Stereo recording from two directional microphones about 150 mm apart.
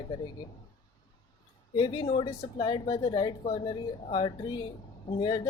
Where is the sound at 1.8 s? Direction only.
30° left (ahead or behind).